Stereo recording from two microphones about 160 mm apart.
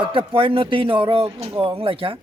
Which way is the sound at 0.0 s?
35° right (ahead or behind).